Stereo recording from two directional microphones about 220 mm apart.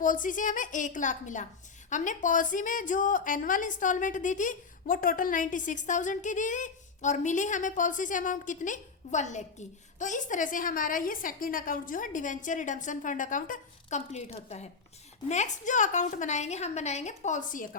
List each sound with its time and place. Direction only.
0.0 s a woman's voice: 35° left (ahead or behind)